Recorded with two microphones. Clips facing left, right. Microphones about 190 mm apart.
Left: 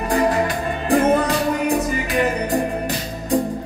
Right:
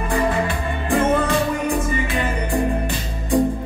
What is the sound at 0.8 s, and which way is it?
Music, 40° left (ahead or behind).